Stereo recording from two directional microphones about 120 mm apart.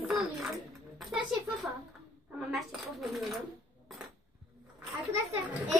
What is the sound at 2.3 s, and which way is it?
A child's voice, centre (ahead or behind).